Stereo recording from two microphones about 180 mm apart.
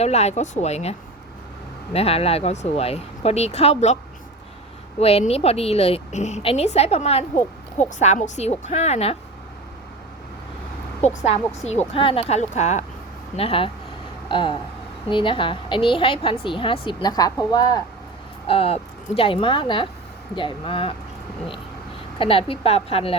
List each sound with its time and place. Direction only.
0.0 s a woman's voice: 35° left (ahead or behind)
4.9 s a woman's voice: 35° left (ahead or behind)
11.0 s a woman's voice: 40° left (ahead or behind); by 17.8 s 20° left (ahead or behind)
18.4 s a woman's voice: 30° left (ahead or behind)
22.2 s a woman's voice: 30° left (ahead or behind)